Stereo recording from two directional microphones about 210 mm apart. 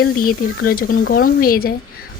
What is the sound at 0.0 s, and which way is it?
A woman's voice, 45° left (ahead or behind).